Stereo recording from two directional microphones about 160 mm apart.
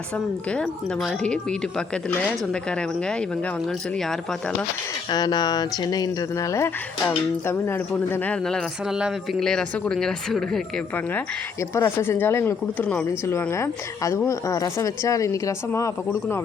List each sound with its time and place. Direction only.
0.5 s speech: 5° left (ahead or behind)
5.1 s speech: 25° left (ahead or behind)